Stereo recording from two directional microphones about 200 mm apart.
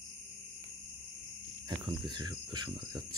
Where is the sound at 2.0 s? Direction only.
20° right (ahead or behind).